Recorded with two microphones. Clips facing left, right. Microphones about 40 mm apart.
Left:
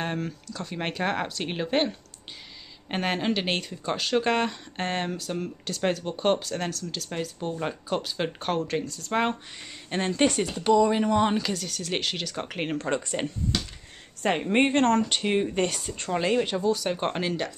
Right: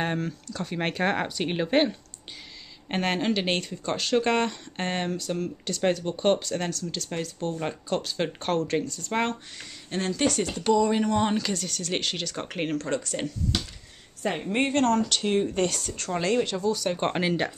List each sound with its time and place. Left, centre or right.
0.0 s speech: centre
9.8 s speech: left
10.4 s speech: centre
12.7 s speech: centre
14.5 s speech: left; by 17.1 s centre
17.1 s speech: centre